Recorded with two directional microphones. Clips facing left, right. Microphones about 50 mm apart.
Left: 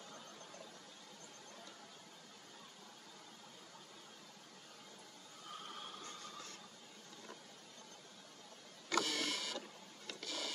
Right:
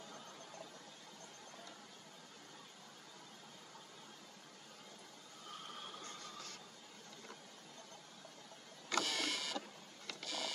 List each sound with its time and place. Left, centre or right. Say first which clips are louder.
8.9 s printer: left 1 dB; right